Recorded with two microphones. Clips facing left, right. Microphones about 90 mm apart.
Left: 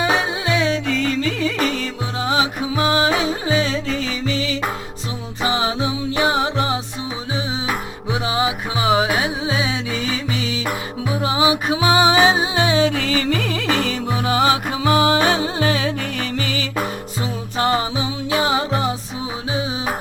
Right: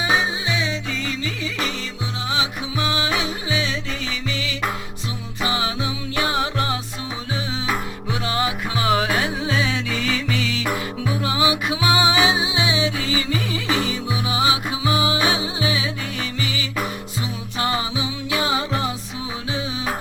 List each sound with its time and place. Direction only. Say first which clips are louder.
0.0 s music: left 2 dB; 60° left (ahead or behind); by 6.7 s 20° left (ahead or behind)
8.1 s music: left 3 dB; 15° left (ahead or behind); by 16.6 s 45° left (ahead or behind)
17.6 s music: left 4 dB; 35° left (ahead or behind)